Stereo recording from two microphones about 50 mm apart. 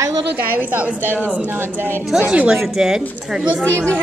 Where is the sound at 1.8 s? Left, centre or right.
Right.